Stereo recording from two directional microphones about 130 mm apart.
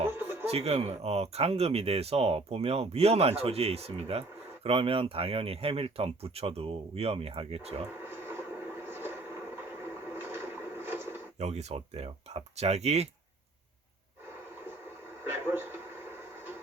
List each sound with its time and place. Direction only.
0.1 s chuckle: 15° right (ahead or behind)
0.4 s speech: 50° right (ahead or behind)
7.9 s vehicle: 15° right (ahead or behind)
11.3 s speech: 55° right (ahead or behind)
15.2 s television: 15° right (ahead or behind)